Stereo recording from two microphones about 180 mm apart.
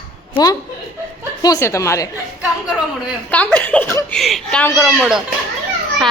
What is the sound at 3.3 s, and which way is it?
Speech, 5° left (ahead or behind).